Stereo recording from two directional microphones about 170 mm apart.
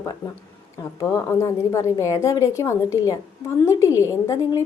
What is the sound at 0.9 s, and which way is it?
A woman's voice, 20° left (ahead or behind).